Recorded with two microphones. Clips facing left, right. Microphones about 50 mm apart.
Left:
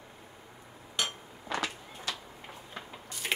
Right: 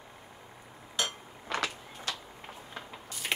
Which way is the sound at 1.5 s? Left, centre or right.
Right.